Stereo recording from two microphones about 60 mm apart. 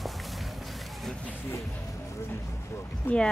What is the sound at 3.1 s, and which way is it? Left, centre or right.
Speech, left.